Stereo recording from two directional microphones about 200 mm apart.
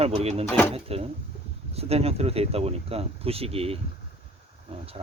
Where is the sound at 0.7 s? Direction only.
30° right (ahead or behind).